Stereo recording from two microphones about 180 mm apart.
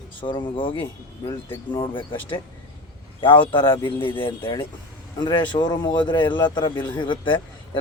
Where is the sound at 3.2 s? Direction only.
25° left (ahead or behind).